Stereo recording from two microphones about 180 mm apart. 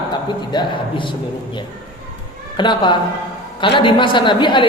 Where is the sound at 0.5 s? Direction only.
25° left (ahead or behind).